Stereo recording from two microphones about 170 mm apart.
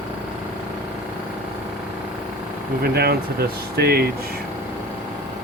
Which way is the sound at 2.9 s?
65° right (ahead or behind).